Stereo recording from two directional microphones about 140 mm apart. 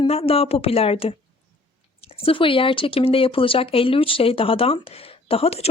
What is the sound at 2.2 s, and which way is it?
Speech, 40° left (ahead or behind).